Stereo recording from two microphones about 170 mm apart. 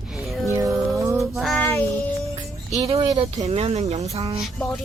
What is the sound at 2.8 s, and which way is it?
Speech, 35° right (ahead or behind).